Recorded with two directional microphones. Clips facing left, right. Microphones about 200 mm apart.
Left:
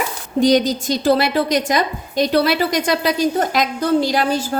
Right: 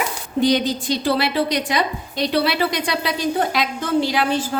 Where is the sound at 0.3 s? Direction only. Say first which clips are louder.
Left 4 dB; 45° left (ahead or behind).